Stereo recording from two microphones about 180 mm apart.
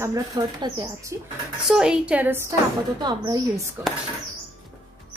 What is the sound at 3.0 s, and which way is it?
Speech, 25° right (ahead or behind).